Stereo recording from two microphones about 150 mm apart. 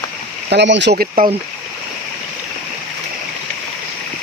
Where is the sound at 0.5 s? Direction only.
90° right.